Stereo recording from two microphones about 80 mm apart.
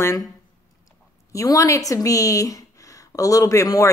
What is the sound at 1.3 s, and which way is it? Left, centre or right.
A woman's voice, left.